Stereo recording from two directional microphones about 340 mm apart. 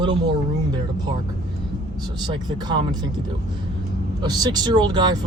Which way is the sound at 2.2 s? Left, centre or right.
Centre.